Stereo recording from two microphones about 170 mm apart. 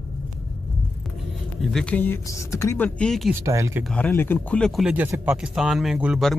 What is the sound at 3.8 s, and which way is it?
Speech, 5° left (ahead or behind).